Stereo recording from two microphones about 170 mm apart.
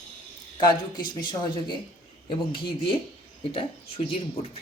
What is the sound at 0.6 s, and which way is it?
Speech, 25° left (ahead or behind).